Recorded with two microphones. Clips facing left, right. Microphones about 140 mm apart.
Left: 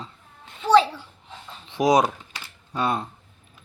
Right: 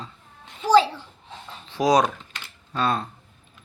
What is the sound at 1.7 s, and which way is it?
A child's voice, 25° left (ahead or behind).